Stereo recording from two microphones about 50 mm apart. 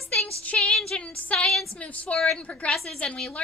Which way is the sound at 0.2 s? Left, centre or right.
Left.